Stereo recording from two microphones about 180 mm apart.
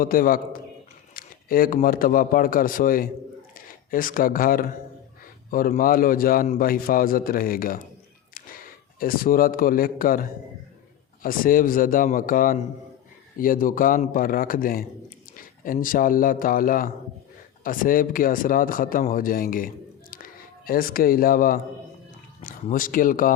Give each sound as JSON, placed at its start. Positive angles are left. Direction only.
{"t": 0.0, "sound": "speech", "side_deg": 50}
{"t": 9.0, "sound": "speech", "side_deg": 50}